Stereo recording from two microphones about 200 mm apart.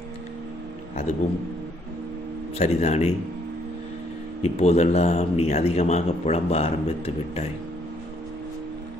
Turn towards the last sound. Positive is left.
turn(degrees=30)  # may be behind; listen again after turning